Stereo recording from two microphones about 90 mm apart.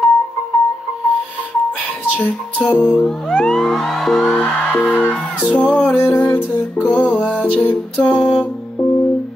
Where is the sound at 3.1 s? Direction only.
Centre (ahead or behind).